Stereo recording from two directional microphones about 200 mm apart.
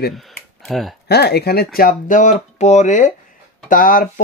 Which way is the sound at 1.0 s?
55° left (ahead or behind).